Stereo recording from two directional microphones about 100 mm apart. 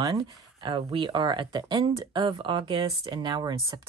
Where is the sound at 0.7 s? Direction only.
55° right (ahead or behind).